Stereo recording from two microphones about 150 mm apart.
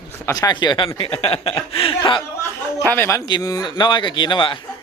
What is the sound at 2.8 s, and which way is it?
A man's voice, 15° left (ahead or behind).